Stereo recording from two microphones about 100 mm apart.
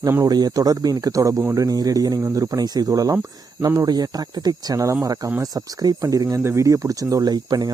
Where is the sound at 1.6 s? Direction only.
40° right (ahead or behind).